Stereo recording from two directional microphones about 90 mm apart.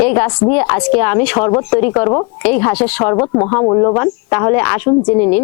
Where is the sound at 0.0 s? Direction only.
20° left (ahead or behind).